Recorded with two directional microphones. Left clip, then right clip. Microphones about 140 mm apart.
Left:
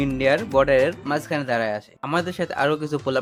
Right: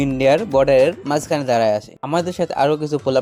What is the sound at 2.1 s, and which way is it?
Speech, 25° right (ahead or behind).